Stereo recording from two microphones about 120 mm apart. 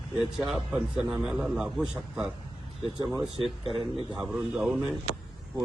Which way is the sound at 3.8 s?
5° right (ahead or behind).